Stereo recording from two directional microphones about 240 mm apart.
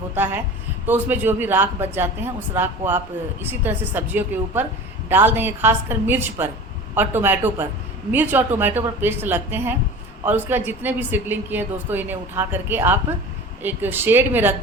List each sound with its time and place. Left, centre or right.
0.9 s a woman's voice: centre